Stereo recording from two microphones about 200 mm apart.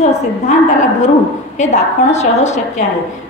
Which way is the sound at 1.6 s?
35° left (ahead or behind).